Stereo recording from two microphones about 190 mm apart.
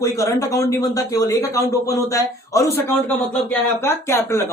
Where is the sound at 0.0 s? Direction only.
15° left (ahead or behind).